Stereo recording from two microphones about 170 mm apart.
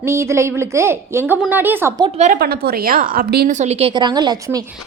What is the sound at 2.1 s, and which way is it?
Speech, 45° right (ahead or behind).